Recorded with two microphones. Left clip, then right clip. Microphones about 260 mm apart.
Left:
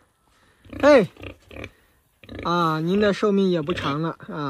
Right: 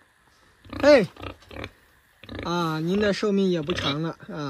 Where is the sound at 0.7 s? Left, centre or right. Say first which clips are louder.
Left 2 dB; centre.